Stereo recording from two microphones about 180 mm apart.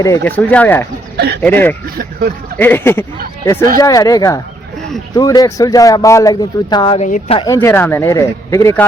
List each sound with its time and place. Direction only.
0.0 s speech: 15° left (ahead or behind)
1.1 s a sound: 65° right (ahead or behind)
1.4 s speech: 10° left (ahead or behind)
7.0 s speech: 40° left (ahead or behind)
7.3 s speech: 15° left (ahead or behind)